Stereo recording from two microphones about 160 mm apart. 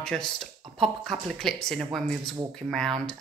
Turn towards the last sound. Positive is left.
turn(degrees=5)  # may be behind; listen again after turning